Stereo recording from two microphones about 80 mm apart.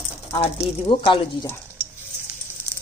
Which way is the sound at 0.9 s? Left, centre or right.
Left.